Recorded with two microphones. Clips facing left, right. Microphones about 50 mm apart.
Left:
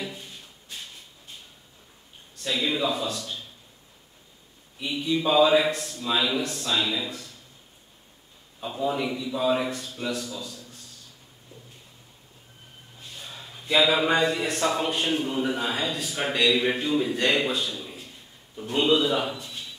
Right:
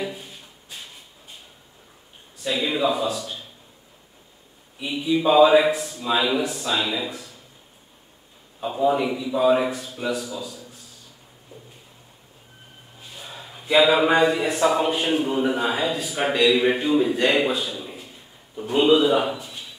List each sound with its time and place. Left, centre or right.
0.0 s shuffle: centre
2.4 s speech: centre
4.7 s speech: centre
8.5 s speech: centre
13.0 s speech: centre